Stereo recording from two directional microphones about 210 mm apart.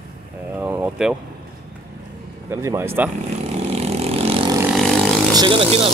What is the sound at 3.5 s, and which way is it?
Vehicle, 30° right (ahead or behind).